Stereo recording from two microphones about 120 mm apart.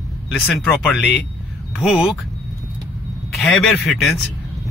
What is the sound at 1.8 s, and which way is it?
Speech, 5° right (ahead or behind).